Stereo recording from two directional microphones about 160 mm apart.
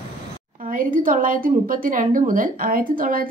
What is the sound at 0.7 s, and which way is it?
A woman's voice, 60° right (ahead or behind).